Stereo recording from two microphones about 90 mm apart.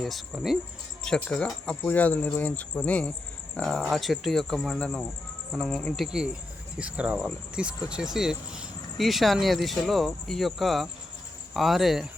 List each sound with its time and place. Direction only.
0.3 s speech: 10° right (ahead or behind)
1.0 s speech: 5° left (ahead or behind)